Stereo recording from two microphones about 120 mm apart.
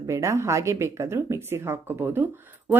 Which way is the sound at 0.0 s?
25° right (ahead or behind).